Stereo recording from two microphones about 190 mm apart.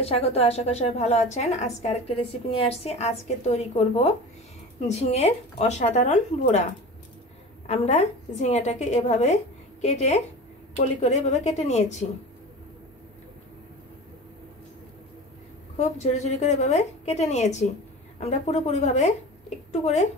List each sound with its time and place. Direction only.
0.0 s a woman's voice: 30° left (ahead or behind)
7.6 s a woman's voice: 35° left (ahead or behind)
15.8 s a woman's voice: 35° left (ahead or behind)